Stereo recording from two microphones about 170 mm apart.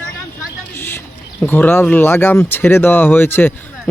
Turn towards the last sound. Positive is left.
turn(degrees=10)  # may be behind; listen again after turning